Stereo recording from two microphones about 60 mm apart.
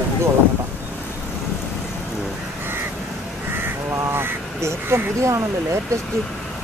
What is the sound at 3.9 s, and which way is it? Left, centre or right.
Speech, right.